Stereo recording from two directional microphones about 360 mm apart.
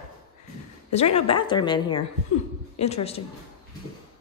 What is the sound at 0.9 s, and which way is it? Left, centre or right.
A woman's voice, centre.